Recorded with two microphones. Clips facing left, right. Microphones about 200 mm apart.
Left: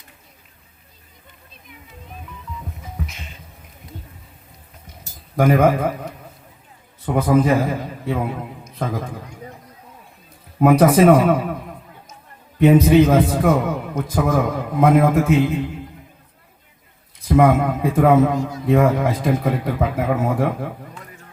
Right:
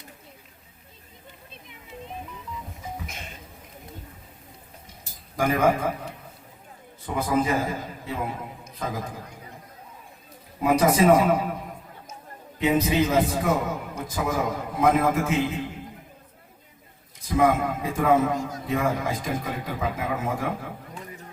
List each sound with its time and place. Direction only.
1.6 s music: 25° right (ahead or behind)
5.4 s a man's voice: 55° left (ahead or behind)
7.0 s a man's voice: 55° left (ahead or behind)
10.6 s a man's voice: 55° left (ahead or behind)
12.5 s a man's voice: 55° left (ahead or behind)
17.2 s a man's voice: 55° left (ahead or behind)